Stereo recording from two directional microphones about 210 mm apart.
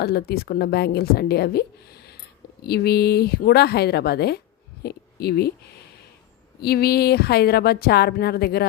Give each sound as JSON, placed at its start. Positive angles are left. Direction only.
{"t": 0.0, "sound": "a woman's voice", "side_deg": 50}
{"t": 2.6, "sound": "a woman's voice", "side_deg": 50}
{"t": 6.6, "sound": "a woman's voice", "side_deg": 50}